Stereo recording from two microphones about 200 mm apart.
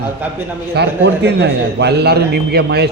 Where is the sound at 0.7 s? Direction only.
60° right (ahead or behind).